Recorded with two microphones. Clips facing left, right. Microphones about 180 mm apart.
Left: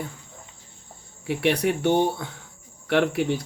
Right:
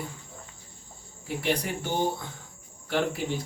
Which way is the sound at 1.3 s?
70° left (ahead or behind).